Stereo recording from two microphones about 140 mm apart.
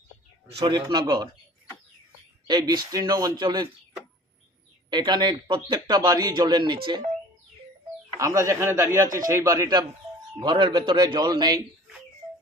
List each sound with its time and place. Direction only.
0.6 s speech: 30° right (ahead or behind)
2.5 s speech: 30° right (ahead or behind)
4.9 s speech: 30° right (ahead or behind)
8.2 s speech: 25° right (ahead or behind)